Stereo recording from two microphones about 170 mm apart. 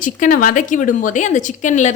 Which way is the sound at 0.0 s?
50° left (ahead or behind).